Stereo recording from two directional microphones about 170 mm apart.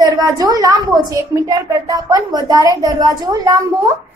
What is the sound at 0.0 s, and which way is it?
A woman's voice, 20° right (ahead or behind).